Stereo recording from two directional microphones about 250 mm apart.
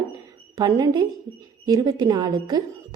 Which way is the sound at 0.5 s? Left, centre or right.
Centre.